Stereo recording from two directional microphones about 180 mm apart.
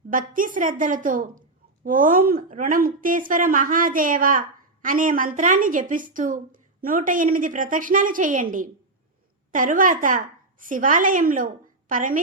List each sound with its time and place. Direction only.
0.1 s a woman's voice: 50° right (ahead or behind)